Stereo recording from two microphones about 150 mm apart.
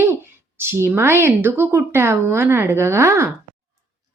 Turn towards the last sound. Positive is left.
turn(degrees=-15)  # may be behind; listen again after turning